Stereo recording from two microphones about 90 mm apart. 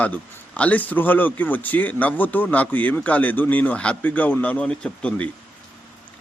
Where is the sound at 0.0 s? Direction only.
15° left (ahead or behind).